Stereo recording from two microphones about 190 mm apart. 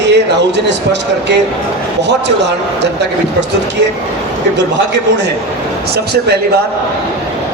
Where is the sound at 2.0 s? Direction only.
65° right (ahead or behind).